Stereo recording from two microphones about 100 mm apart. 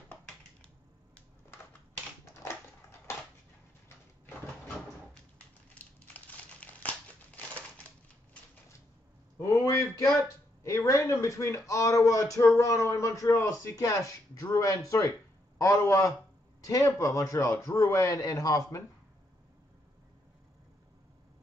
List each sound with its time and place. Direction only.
6.1 s crumpling: 15° left (ahead or behind)
9.4 s a man's voice: 30° left (ahead or behind)